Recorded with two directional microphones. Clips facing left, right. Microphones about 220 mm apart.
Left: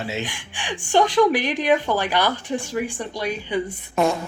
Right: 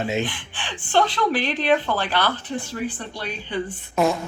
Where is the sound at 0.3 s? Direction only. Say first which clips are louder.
Left 2 dB; 15° left (ahead or behind).